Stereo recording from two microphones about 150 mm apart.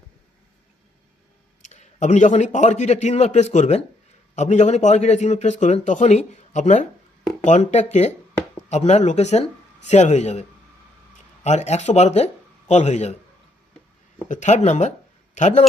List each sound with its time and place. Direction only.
1.7 s a man's voice: 55° left (ahead or behind)
11.4 s speech: 50° left (ahead or behind)
14.3 s a man's voice: 50° left (ahead or behind)